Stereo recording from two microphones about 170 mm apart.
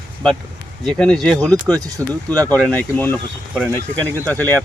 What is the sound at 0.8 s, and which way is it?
Speech, 5° left (ahead or behind).